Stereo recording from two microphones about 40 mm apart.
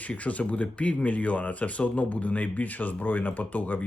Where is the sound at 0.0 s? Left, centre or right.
Left.